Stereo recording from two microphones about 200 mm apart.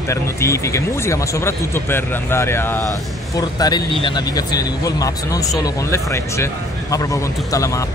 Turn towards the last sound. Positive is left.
turn(degrees=15)  # may be behind; listen again after turning